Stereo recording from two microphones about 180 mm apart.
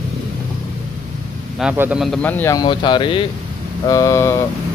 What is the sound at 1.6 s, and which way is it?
Speech, 10° right (ahead or behind).